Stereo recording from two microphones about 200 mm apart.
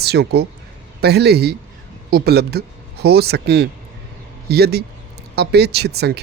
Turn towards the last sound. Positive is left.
turn(degrees=-55)  # may be behind; listen again after turning